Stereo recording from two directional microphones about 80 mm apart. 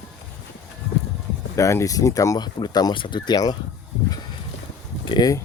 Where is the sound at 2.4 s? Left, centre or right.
Left.